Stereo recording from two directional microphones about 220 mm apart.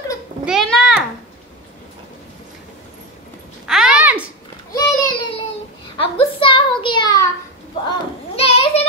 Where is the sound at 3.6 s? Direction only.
5° right (ahead or behind).